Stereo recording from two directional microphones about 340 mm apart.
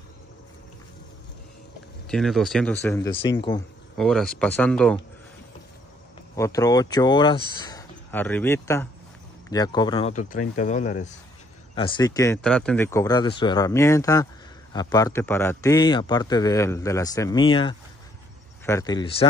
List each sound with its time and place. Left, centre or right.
2.0 s a man's voice: centre
3.9 s speech: centre
6.3 s a man's voice: centre